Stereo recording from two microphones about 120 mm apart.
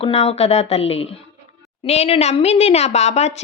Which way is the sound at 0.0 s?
60° left (ahead or behind).